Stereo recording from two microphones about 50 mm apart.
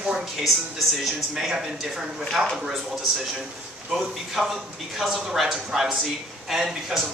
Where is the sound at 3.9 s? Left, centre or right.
Centre.